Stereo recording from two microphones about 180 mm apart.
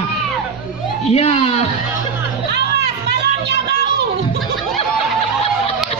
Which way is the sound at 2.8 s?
65° right (ahead or behind).